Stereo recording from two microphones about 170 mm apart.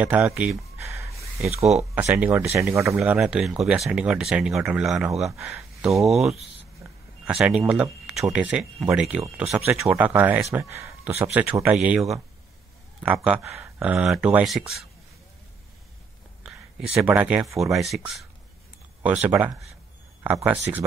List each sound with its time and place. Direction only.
0.0 s speech: 5° right (ahead or behind)
0.7 s a sound: 15° right (ahead or behind)
1.5 s speech: 40° right (ahead or behind)
2.0 s speech: 10° right (ahead or behind)
3.0 s speech: 5° right (ahead or behind)
6.8 s a sound: 15° right (ahead or behind)
7.2 s speech: 5° right (ahead or behind)
9.4 s speech: 15° right (ahead or behind)
16.4 s speech: 5° right (ahead or behind)